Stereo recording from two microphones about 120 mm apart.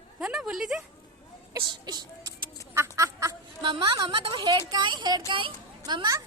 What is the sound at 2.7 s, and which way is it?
Duck, 25° right (ahead or behind).